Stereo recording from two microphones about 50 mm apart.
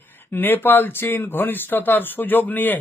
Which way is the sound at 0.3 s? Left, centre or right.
Left.